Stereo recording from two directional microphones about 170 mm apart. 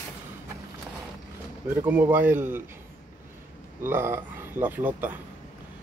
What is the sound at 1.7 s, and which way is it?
Speech, 10° right (ahead or behind).